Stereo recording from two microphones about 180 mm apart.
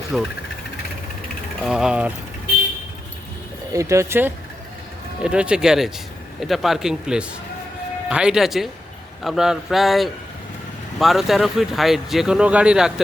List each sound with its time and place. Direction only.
0.1 s speech: 5° right (ahead or behind)
1.6 s speech: 5° right (ahead or behind)
3.7 s speech: 15° right (ahead or behind)